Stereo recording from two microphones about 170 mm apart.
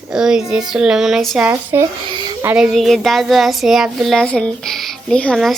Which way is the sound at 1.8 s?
25° right (ahead or behind).